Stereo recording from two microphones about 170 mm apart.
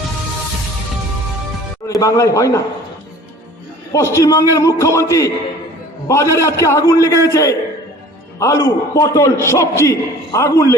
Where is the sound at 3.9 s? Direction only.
15° left (ahead or behind).